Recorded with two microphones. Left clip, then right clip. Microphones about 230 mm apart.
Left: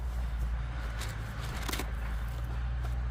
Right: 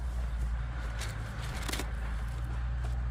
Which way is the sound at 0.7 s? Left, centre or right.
Left.